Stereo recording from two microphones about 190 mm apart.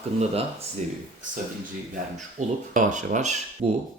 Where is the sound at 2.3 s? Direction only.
40° right (ahead or behind).